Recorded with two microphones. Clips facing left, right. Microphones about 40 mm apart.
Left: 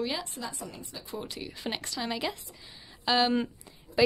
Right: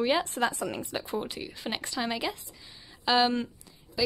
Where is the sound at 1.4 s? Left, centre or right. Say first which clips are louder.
Right 1 dB; centre.